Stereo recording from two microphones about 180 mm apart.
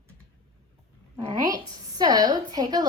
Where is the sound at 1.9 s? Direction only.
25° right (ahead or behind).